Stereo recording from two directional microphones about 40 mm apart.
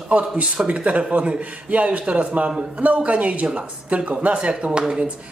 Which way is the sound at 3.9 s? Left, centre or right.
Right.